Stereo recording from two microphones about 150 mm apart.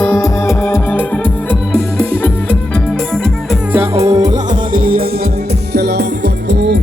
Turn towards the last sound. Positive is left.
turn(degrees=-90)